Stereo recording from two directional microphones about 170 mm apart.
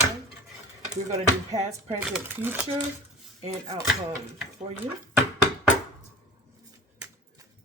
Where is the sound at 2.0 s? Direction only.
10° right (ahead or behind).